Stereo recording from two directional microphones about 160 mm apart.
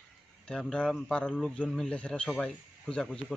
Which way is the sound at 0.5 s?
5° left (ahead or behind).